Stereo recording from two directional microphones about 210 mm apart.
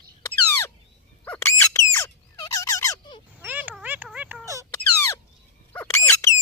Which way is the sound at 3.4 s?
10° right (ahead or behind).